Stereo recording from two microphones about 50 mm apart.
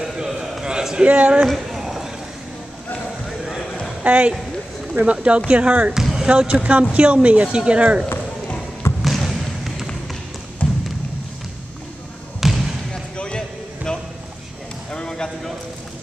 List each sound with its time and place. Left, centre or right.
0.0 s a sound: centre
1.0 s speech: right
1.5 s clip-clop: centre
3.3 s a sound: centre
4.0 s speech: right
9.0 s basketball bounce: centre
10.6 s music: left
12.4 s basketball bounce: centre
12.9 s basketball bounce: centre
13.9 s a sound: centre